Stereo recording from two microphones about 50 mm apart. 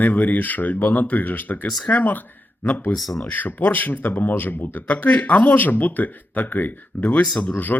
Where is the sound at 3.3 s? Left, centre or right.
Left.